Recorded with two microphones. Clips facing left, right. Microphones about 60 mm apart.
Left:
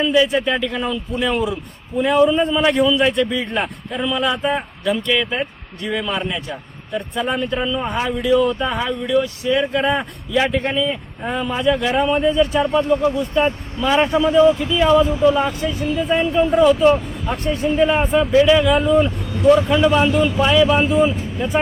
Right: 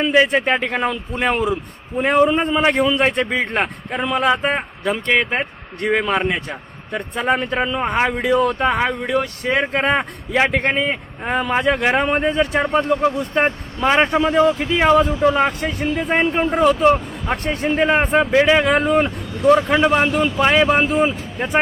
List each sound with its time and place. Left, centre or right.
0.0 s a man's voice: right
19.5 s a man's voice: right